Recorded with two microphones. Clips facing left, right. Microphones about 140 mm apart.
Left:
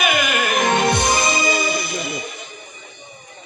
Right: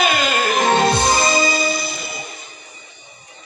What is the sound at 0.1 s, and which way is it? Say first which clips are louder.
Music: right 1 dB; 20° left (ahead or behind).